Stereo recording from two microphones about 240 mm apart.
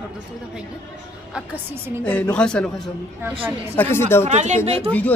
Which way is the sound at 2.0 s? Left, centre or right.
Centre.